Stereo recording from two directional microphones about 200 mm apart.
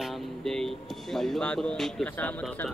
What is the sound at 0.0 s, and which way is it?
Speech, centre (ahead or behind).